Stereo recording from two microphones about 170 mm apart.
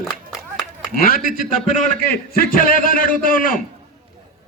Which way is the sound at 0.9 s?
60° left (ahead or behind).